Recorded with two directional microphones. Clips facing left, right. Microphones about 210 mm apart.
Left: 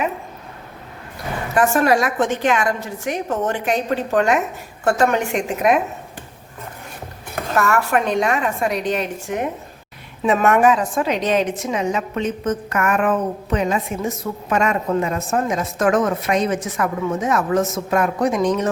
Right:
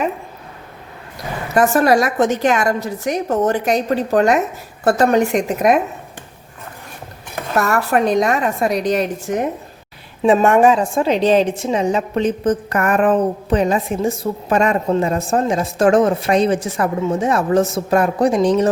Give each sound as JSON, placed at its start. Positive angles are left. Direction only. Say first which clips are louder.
{"t": 1.5, "sound": "a woman's voice", "louder": "right 3 dB", "side_deg": -40}
{"t": 7.5, "sound": "a woman's voice", "louder": "right 2 dB", "side_deg": -40}